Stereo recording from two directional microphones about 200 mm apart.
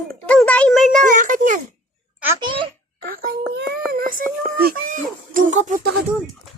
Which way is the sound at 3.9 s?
45° right (ahead or behind).